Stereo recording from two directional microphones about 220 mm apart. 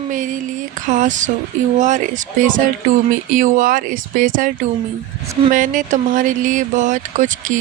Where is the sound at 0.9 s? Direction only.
35° right (ahead or behind).